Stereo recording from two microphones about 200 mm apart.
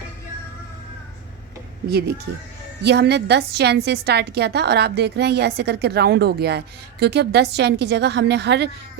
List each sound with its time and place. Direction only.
1.9 s a woman's voice: 55° right (ahead or behind)